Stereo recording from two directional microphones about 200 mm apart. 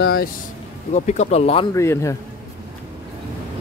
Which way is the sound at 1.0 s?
35° left (ahead or behind).